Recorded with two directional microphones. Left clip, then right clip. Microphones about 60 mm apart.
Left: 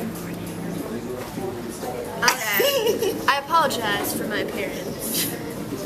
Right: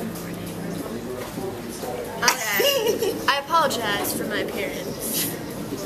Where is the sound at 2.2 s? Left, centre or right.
Centre.